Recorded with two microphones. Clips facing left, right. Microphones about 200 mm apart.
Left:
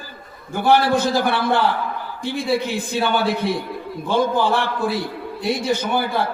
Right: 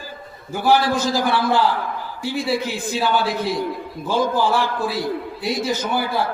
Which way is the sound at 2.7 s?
60° left (ahead or behind).